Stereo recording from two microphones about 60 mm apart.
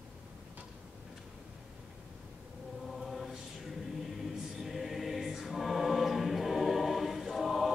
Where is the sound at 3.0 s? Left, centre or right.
Centre.